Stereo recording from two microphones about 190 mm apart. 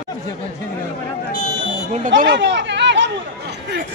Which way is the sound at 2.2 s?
70° right (ahead or behind).